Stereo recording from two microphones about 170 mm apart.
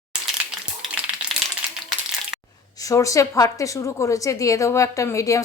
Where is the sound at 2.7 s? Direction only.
20° left (ahead or behind).